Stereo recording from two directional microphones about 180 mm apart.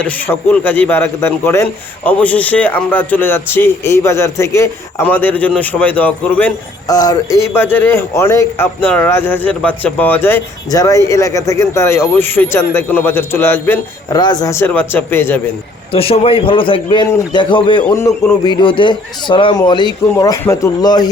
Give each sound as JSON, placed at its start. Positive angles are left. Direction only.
{"t": 0.0, "sound": "a man's voice", "side_deg": 10}
{"t": 6.8, "sound": "a man's voice", "side_deg": 20}
{"t": 15.9, "sound": "a man's voice", "side_deg": 30}
{"t": 17.8, "sound": "a man's voice", "side_deg": 15}